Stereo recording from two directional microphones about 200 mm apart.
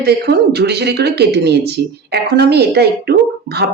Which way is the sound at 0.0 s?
50° right (ahead or behind).